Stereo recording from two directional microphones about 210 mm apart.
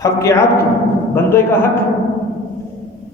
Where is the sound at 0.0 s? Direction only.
15° left (ahead or behind).